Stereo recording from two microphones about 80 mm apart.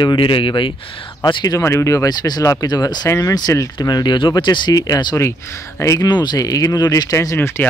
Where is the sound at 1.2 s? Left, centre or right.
Left.